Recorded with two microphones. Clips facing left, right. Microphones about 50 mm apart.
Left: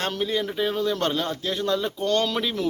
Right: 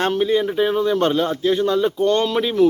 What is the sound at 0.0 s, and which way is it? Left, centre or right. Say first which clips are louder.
Speech: right 8 dB; right.